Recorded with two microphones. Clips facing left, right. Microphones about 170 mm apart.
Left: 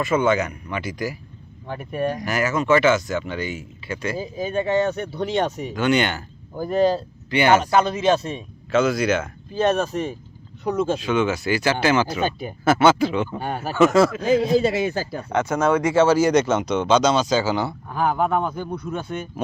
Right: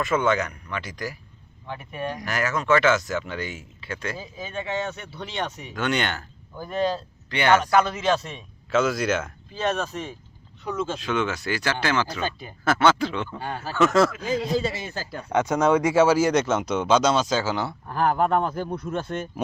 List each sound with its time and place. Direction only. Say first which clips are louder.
0.0 s speech: left 3 dB; centre (ahead or behind)
1.6 s speech: left 6 dB; 40° left (ahead or behind)
2.2 s speech: even; 5° left (ahead or behind)
4.2 s speech: left 9 dB; 40° left (ahead or behind)
5.7 s speech: left 5 dB; 5° left (ahead or behind)
6.6 s speech: left 6 dB; 35° left (ahead or behind)
7.3 s speech: left 3 dB; 5° left (ahead or behind)
7.6 s speech: left 2 dB; 25° left (ahead or behind)
8.7 s speech: left 3 dB; centre (ahead or behind)
9.6 s speech: left 6 dB; 45° left (ahead or behind)
11.0 s speech: left 5 dB; 5° left (ahead or behind)
14.3 s speech: left 7 dB; 65° left (ahead or behind)
14.9 s speech: left 6 dB; 10° left (ahead or behind)
15.3 s speech: even; 15° right (ahead or behind)